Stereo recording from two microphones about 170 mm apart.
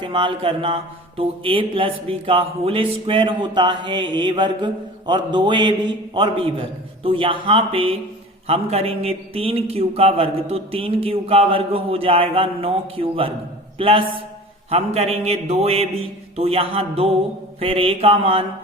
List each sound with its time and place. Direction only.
0.0 s a man's voice: 30° right (ahead or behind)